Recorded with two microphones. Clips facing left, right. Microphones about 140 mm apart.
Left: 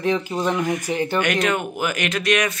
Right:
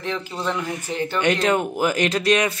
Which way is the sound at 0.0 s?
15° left (ahead or behind).